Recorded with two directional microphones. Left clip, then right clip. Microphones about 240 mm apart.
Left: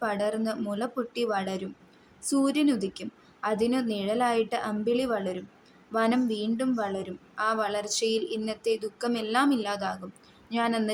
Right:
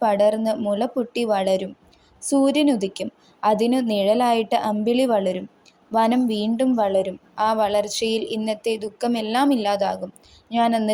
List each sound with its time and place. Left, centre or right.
0.0 s a woman's voice: right